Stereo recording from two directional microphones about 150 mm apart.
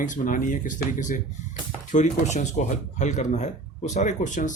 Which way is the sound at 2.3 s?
50° left (ahead or behind).